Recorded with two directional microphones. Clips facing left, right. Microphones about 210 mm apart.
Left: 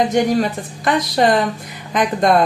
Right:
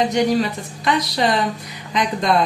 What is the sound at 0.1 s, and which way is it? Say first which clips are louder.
A woman's voice: left 2 dB; 50° left (ahead or behind).